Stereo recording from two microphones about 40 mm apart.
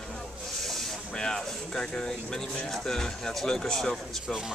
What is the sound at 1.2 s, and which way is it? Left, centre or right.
Speech, centre.